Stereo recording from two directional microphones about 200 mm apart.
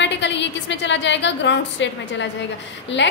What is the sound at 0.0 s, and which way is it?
A woman's voice, 60° left (ahead or behind).